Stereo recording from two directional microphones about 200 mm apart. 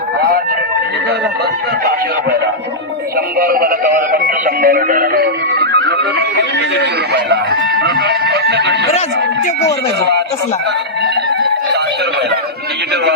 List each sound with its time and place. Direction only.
3.3 s music: 45° right (ahead or behind)